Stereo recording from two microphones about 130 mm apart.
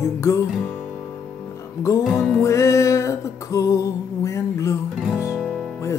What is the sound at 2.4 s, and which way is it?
Music, 25° left (ahead or behind).